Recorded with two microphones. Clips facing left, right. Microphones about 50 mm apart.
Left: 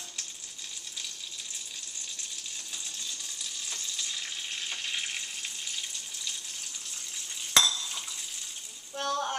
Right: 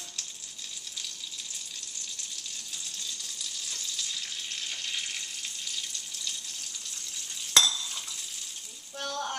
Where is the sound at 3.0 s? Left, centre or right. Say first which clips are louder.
Even; centre.